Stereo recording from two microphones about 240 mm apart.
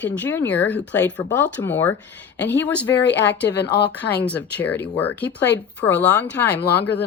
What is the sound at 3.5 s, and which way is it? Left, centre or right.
Speech, left.